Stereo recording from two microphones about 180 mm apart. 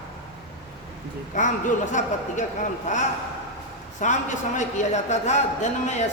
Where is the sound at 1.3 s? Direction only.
45° left (ahead or behind).